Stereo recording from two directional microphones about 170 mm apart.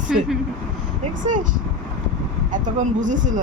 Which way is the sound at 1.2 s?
50° right (ahead or behind).